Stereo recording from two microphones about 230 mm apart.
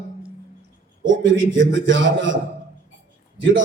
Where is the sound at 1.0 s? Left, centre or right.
Right.